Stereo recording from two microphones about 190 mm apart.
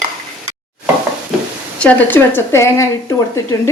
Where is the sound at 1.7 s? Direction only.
10° left (ahead or behind).